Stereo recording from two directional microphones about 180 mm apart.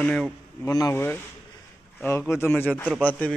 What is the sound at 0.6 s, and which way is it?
Speech, 20° left (ahead or behind).